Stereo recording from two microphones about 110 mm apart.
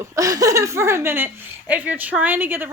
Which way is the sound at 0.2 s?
30° right (ahead or behind).